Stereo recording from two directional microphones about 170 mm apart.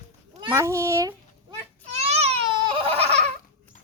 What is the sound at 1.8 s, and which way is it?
Baby cry, 40° right (ahead or behind).